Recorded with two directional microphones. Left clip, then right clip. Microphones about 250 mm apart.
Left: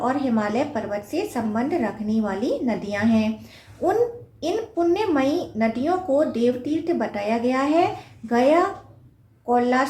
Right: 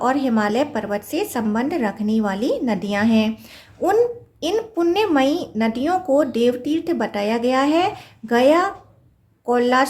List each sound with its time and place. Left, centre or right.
0.0 s speech: right
4.4 s a woman's voice: right